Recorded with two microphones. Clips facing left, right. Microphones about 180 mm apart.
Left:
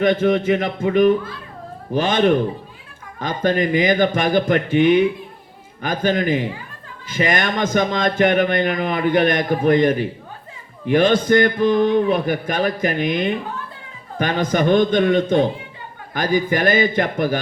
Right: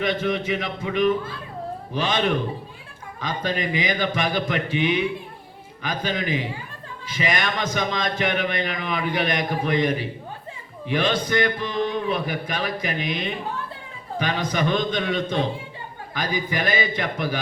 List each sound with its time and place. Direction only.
0.0 s a man's voice: 50° left (ahead or behind)